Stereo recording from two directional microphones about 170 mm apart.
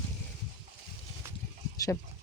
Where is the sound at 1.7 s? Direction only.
20° left (ahead or behind).